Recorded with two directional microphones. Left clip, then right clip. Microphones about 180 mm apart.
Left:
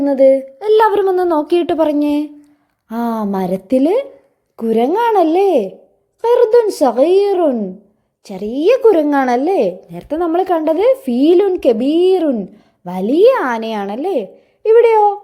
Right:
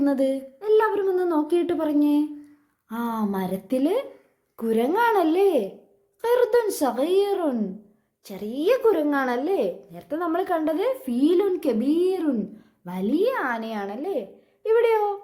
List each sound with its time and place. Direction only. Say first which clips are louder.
0.0 s child singing: left 13 dB; 15° left (ahead or behind)
0.6 s a woman's voice: left 7 dB; 50° left (ahead or behind); by 15.2 s 30° left (ahead or behind)